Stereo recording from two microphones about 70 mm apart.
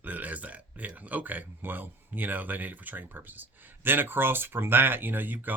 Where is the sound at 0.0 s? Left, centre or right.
Right.